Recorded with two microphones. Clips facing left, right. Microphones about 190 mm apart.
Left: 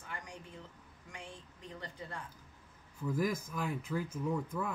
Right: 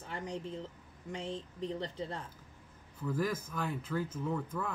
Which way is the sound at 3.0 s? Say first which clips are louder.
Even; 10° left (ahead or behind).